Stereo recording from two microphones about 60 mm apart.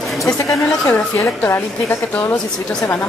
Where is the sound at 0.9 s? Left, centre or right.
Left.